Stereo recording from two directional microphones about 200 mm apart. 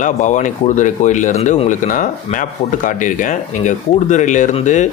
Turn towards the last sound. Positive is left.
turn(degrees=35)  # may be behind; listen again after turning